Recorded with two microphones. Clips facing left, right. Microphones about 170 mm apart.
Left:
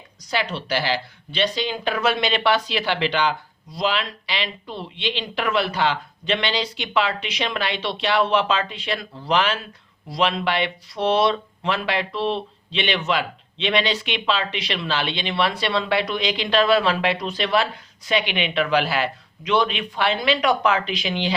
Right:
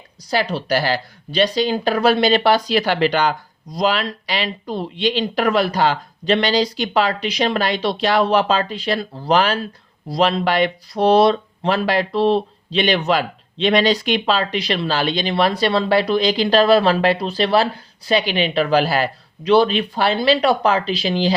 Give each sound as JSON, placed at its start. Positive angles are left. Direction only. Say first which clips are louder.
{"t": 0.3, "sound": "speech", "louder": "right 5 dB", "side_deg": -40}